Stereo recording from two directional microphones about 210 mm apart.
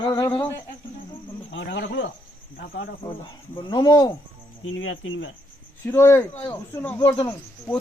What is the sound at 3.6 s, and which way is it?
Speech, 20° left (ahead or behind).